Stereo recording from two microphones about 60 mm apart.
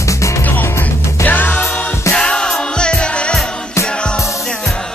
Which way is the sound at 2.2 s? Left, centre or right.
Centre.